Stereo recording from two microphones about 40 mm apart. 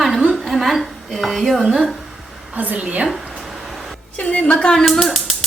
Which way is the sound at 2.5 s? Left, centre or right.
Right.